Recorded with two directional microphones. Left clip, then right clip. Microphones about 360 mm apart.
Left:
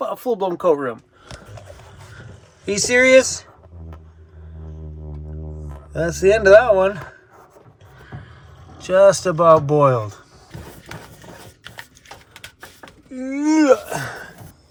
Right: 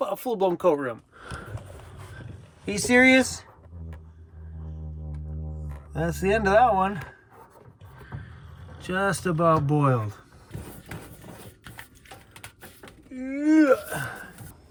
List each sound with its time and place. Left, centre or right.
0.0 s speech: centre
2.6 s speech: centre
5.9 s speech: centre
8.8 s speech: centre
13.1 s speech: centre